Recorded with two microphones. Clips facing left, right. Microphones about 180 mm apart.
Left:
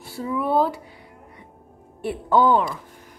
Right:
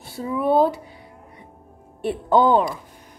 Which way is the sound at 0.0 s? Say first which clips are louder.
Right 2 dB; 20° right (ahead or behind).